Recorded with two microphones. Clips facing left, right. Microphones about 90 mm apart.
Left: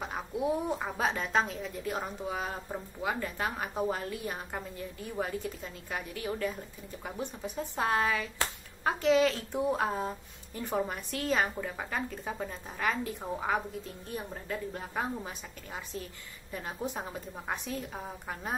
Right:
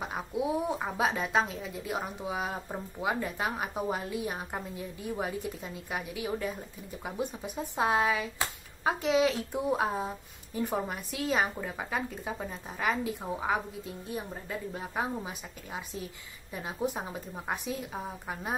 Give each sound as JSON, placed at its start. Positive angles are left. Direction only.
{"t": 0.0, "sound": "a woman's voice", "side_deg": -5}